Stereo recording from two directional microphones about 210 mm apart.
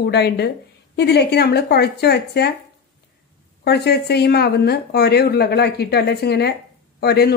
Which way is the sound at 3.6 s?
50° left (ahead or behind).